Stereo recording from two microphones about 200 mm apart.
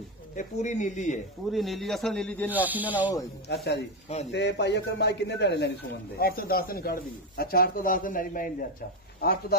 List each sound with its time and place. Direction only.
0.4 s speech: 35° left (ahead or behind)
1.5 s a man's voice: centre (ahead or behind)
2.5 s speech: 10° right (ahead or behind)
3.4 s a man's voice: 55° left (ahead or behind)
6.1 s a man's voice: 50° left (ahead or behind)